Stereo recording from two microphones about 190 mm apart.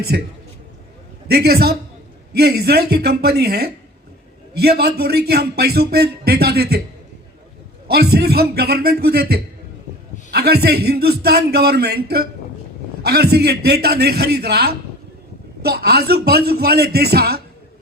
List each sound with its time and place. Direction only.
1.3 s a man's voice: 55° right (ahead or behind)
7.9 s a man's voice: 55° right (ahead or behind)